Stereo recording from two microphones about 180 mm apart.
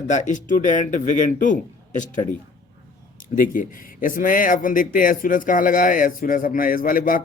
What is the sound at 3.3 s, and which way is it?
Speech, 50° left (ahead or behind).